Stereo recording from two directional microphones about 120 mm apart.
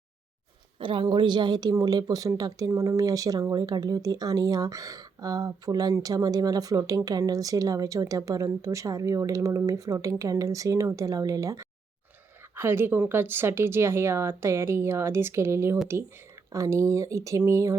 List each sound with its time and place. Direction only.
0.8 s a woman's voice: 45° right (ahead or behind); by 17.7 s 25° right (ahead or behind)